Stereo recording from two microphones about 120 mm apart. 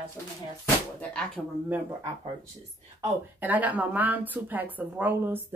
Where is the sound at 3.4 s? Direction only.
15° right (ahead or behind).